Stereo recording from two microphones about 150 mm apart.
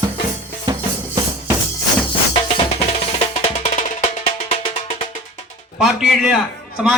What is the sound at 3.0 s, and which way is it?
Music, 40° left (ahead or behind).